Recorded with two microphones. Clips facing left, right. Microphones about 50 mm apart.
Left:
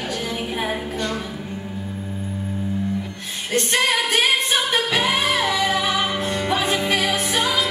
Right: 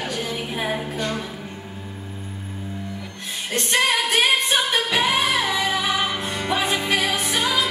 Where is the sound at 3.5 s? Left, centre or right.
Centre.